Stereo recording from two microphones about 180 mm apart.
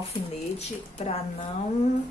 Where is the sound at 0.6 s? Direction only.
35° left (ahead or behind).